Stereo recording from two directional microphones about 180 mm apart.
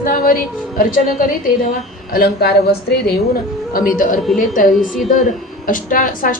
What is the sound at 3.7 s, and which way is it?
A woman's voice, 50° left (ahead or behind).